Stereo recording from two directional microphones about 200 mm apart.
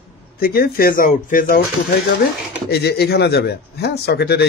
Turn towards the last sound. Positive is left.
turn(degrees=55)  # may be behind; listen again after turning